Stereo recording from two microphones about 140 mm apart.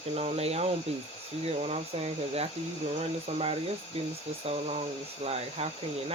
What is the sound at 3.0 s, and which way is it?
Speech, 45° right (ahead or behind).